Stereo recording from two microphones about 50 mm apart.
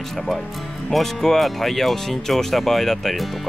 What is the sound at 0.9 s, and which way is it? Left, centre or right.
Speech, centre.